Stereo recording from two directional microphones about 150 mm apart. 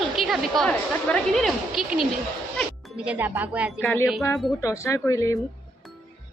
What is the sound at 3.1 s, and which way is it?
Speech, 10° right (ahead or behind).